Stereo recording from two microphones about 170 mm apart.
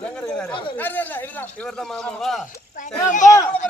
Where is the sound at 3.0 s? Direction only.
45° left (ahead or behind).